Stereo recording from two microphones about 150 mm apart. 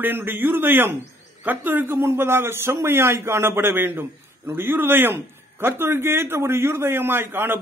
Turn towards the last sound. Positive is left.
turn(degrees=-15)  # may be behind; listen again after turning